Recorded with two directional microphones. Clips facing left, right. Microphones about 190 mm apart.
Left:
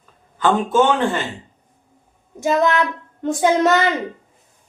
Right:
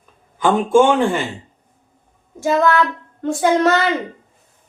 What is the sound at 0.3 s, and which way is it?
Speech, 10° right (ahead or behind).